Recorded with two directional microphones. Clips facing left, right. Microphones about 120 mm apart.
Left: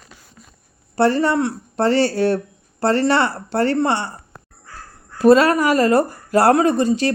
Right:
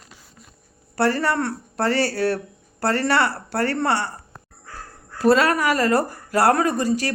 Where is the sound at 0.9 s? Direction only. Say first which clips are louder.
Left 4 dB; 20° left (ahead or behind).